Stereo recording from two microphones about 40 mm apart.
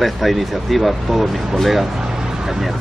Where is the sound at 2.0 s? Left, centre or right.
Centre.